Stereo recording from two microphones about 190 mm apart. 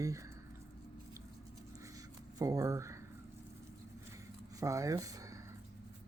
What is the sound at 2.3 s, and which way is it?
Speech, 15° right (ahead or behind).